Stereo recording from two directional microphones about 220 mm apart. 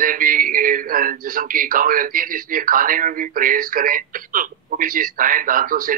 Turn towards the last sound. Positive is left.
turn(degrees=-40)  # may be behind; listen again after turning